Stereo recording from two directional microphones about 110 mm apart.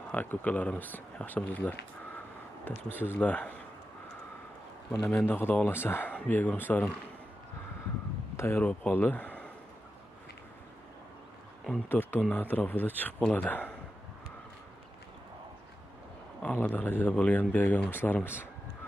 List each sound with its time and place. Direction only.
0.1 s speech: 15° left (ahead or behind)
5.0 s speech: 20° left (ahead or behind)
8.4 s speech: 20° left (ahead or behind)
11.9 s speech: 20° left (ahead or behind)
16.4 s speech: 15° left (ahead or behind)